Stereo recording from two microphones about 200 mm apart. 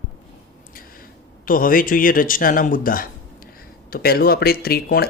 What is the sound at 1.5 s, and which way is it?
Speech, 45° left (ahead or behind).